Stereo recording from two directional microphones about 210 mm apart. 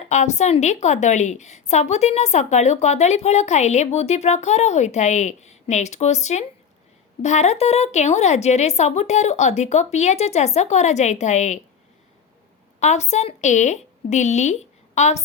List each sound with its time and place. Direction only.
0.1 s a woman's voice: 35° left (ahead or behind)
12.8 s a woman's voice: 30° left (ahead or behind)